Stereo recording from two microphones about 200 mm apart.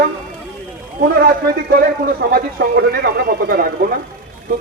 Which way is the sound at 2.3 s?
50° right (ahead or behind).